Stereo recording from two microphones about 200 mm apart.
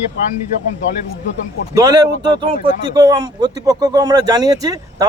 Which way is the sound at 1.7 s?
15° right (ahead or behind).